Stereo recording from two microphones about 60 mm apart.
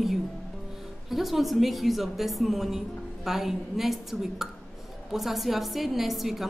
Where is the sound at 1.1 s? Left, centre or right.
Centre.